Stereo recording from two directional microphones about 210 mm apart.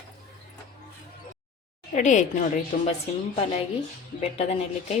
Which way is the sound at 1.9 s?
35° left (ahead or behind).